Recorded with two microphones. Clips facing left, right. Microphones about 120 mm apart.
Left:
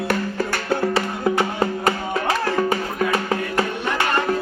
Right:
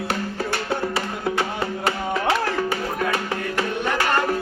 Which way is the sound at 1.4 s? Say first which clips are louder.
Left 4 dB; 35° left (ahead or behind).